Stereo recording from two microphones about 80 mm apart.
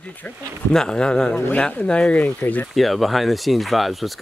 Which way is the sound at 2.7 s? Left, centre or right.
Centre.